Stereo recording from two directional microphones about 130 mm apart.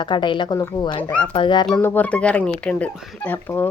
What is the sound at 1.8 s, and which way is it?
Speech, 10° left (ahead or behind).